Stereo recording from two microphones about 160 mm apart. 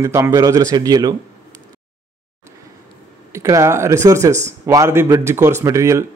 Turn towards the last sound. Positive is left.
turn(degrees=-20)  # may be behind; listen again after turning